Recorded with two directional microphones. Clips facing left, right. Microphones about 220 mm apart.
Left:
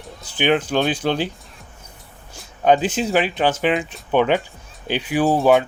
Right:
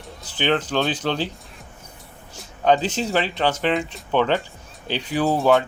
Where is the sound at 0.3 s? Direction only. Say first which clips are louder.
Left 3 dB; 10° left (ahead or behind).